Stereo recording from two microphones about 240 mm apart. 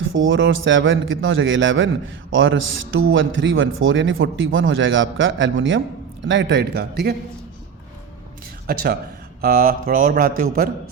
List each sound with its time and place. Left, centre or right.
0.0 s a man's voice: right
8.6 s speech: right